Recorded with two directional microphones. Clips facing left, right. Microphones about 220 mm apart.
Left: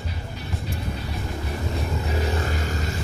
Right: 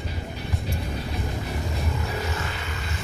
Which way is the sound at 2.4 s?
40° left (ahead or behind).